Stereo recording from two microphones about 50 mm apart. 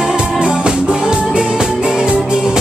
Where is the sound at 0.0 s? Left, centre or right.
Centre.